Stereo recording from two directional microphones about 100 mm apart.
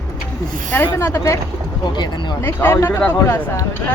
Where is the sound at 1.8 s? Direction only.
50° left (ahead or behind).